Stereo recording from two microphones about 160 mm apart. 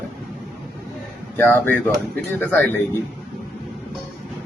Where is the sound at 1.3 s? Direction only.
15° left (ahead or behind).